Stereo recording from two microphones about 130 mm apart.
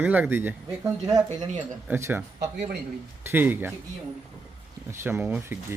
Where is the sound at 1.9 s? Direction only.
15° right (ahead or behind).